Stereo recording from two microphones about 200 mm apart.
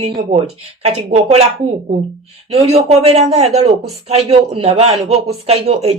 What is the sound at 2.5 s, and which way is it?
A man's voice, 30° right (ahead or behind).